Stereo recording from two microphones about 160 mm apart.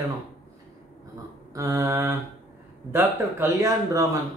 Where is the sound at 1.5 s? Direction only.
20° right (ahead or behind).